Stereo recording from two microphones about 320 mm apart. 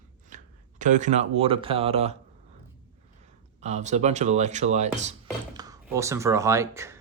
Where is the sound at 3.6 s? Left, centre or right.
Right.